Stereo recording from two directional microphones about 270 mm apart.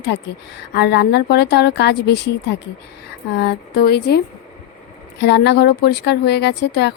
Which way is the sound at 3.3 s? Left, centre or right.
Left.